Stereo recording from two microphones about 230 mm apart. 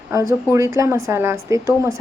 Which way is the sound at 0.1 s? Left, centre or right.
Centre.